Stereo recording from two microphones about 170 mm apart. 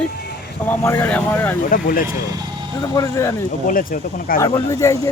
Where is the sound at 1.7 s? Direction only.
55° left (ahead or behind).